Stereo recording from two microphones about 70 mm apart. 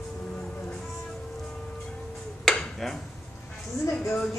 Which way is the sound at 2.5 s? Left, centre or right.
Centre.